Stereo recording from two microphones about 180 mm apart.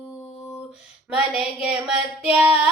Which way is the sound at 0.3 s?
Centre (ahead or behind).